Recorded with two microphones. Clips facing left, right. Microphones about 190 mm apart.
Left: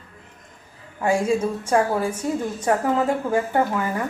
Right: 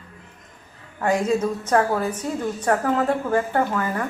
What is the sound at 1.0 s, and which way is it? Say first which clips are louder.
Speech: even; 10° left (ahead or behind).